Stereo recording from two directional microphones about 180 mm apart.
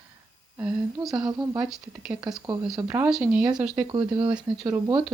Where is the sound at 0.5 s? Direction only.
10° right (ahead or behind).